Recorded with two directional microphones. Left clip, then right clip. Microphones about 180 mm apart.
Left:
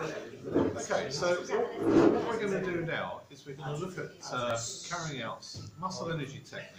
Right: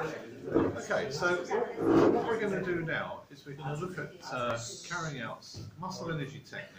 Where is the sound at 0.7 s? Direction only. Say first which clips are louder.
Even; 10° left (ahead or behind).